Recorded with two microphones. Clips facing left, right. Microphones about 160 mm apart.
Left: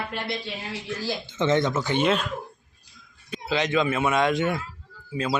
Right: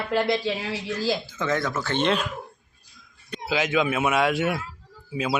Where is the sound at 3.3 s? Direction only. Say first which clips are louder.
Even; 5° right (ahead or behind).